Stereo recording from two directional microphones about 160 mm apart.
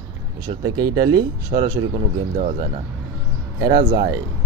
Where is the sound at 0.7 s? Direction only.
25° right (ahead or behind).